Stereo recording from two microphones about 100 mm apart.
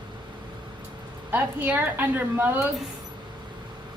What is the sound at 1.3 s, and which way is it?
A woman's voice, 15° right (ahead or behind).